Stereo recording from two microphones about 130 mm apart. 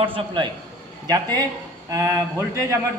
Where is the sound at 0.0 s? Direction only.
40° right (ahead or behind).